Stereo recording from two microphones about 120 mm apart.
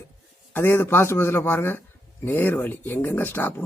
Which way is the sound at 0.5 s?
20° left (ahead or behind).